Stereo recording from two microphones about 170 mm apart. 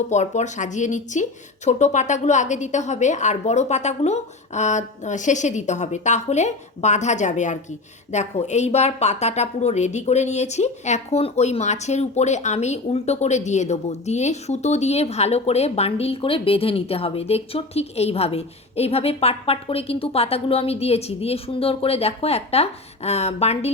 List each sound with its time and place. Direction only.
0.1 s a woman's voice: 45° left (ahead or behind)